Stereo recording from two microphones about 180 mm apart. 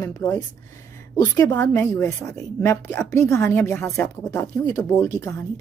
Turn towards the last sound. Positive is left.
turn(degrees=15)  # may be behind; listen again after turning